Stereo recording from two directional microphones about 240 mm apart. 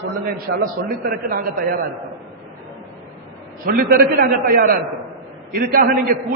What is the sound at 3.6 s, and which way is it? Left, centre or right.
A man's voice, right.